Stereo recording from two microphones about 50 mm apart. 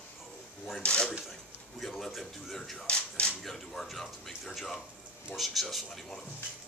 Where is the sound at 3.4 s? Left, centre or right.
Centre.